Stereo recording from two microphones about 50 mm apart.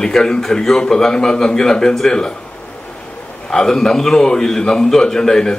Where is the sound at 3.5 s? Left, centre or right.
Centre.